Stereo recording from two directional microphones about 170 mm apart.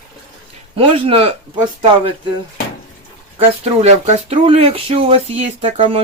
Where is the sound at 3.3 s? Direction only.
35° right (ahead or behind).